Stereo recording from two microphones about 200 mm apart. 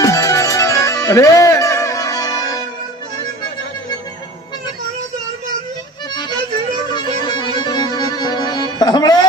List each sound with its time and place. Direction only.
0.0 s music: 15° left (ahead or behind)
6.8 s music: 20° left (ahead or behind)